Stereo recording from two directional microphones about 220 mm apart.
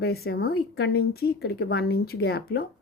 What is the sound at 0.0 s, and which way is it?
A woman's voice, 45° left (ahead or behind).